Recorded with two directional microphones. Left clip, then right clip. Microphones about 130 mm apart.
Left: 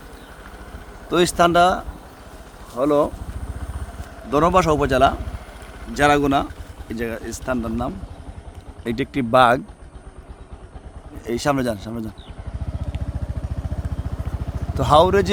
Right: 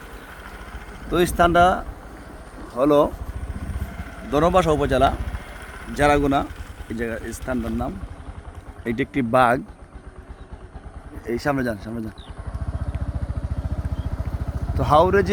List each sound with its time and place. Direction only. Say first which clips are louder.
1.1 s a man's voice: left 2 dB; 15° left (ahead or behind)
1.5 s speech: right 1 dB; centre (ahead or behind)
2.7 s speech: right 1 dB; 20° right (ahead or behind)
4.3 s a man's voice: left 1 dB; 5° left (ahead or behind)
11.3 s speech: left 2 dB; 25° left (ahead or behind)
14.8 s a man's voice: left 2 dB; 15° left (ahead or behind)